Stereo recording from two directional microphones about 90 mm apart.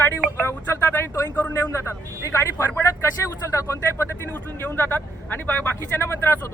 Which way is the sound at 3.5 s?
30° left (ahead or behind).